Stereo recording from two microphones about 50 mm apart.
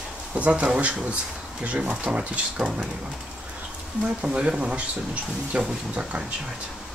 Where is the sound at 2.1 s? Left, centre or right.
Centre.